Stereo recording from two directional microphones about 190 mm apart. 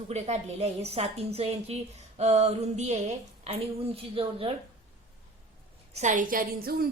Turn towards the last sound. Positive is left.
turn(degrees=-50)  # may be behind; listen again after turning